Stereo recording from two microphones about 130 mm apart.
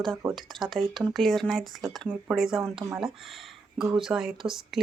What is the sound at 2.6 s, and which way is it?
Speech, 40° right (ahead or behind).